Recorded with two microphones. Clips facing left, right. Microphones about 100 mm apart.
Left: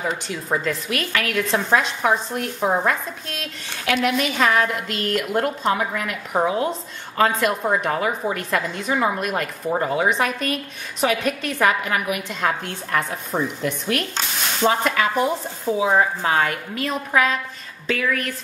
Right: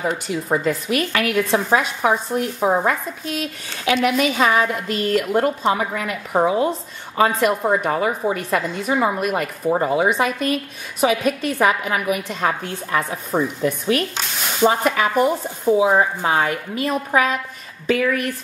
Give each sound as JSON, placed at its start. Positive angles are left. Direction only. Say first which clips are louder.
{"t": 0.0, "sound": "a woman's voice", "louder": "right 3 dB", "side_deg": -5}
{"t": 15.7, "sound": "a woman's voice", "louder": "right 3 dB", "side_deg": -15}